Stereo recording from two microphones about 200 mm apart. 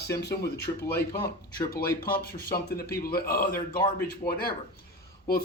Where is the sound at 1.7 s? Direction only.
50° left (ahead or behind).